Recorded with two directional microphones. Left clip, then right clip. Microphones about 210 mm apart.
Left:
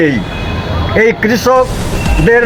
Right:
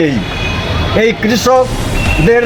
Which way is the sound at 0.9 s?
5° left (ahead or behind).